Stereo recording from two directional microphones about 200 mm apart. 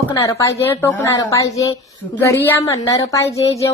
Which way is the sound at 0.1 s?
15° left (ahead or behind).